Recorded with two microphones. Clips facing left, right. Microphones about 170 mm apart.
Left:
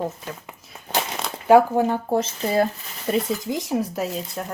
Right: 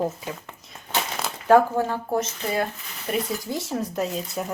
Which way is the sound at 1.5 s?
20° left (ahead or behind).